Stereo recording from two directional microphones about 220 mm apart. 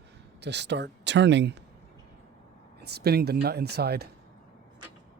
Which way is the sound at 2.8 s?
45° right (ahead or behind).